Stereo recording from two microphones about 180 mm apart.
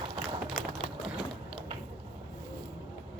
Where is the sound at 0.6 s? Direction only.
35° left (ahead or behind).